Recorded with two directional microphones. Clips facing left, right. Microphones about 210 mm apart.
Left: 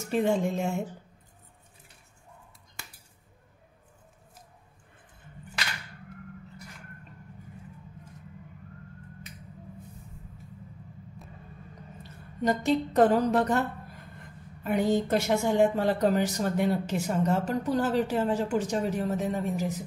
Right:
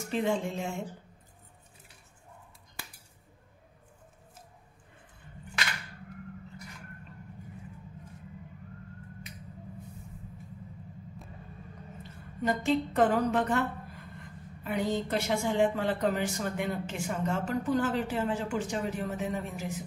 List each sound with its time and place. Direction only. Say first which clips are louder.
0.2 s speech: left 4 dB; 45° left (ahead or behind)
12.4 s speech: left 2 dB; 40° left (ahead or behind)